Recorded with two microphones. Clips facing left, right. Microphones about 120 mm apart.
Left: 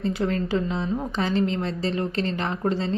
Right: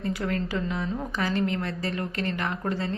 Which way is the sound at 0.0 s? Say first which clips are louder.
Left 4 dB; 25° left (ahead or behind).